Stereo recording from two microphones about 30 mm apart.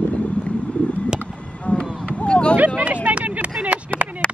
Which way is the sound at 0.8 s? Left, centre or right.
Left.